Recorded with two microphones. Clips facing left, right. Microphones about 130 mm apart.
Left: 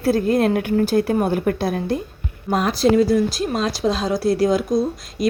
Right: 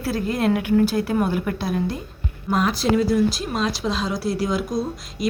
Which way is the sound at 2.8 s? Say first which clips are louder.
Left 5 dB; 40° left (ahead or behind).